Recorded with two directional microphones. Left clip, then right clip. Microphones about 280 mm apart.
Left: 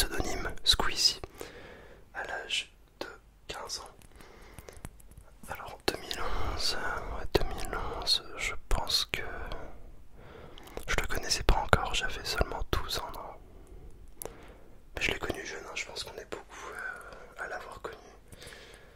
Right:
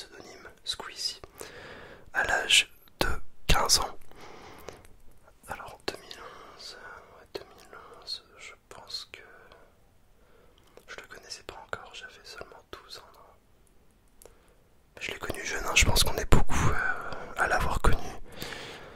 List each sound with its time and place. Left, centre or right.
0.0 s whispering: left
1.3 s whispering: centre
1.6 s whispering: centre; by 3.9 s right
4.4 s a sound: right
5.5 s whispering: centre
6.0 s whispering: left
6.3 s whispering: left
14.2 s a sound: left
15.0 s whispering: left
15.6 s whispering: right